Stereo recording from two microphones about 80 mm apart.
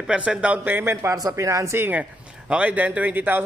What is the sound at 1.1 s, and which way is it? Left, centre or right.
Speech, right.